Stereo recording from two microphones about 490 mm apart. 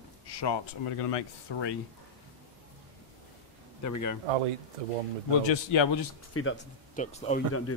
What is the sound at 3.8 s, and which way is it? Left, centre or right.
Speech, left.